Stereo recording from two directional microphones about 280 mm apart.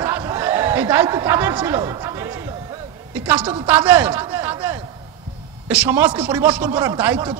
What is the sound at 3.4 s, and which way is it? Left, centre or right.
Speech, centre.